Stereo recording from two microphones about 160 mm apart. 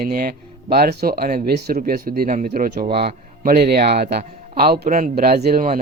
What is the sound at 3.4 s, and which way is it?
Speech, 65° right (ahead or behind).